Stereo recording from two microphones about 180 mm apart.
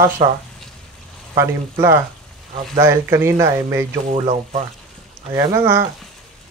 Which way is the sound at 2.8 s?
15° right (ahead or behind).